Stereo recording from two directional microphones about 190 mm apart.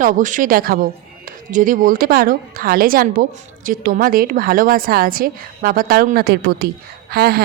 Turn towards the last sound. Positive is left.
turn(degrees=-55)  # may be behind; listen again after turning